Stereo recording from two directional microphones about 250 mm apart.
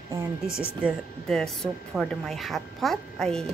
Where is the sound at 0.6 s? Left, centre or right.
Centre.